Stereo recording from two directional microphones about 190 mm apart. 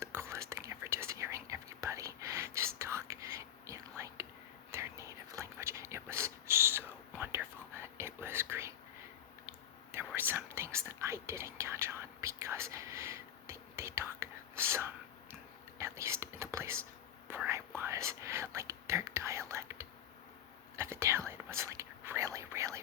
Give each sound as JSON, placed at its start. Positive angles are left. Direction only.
{"t": 0.0, "sound": "whispering", "side_deg": -15}
{"t": 9.9, "sound": "whispering", "side_deg": -10}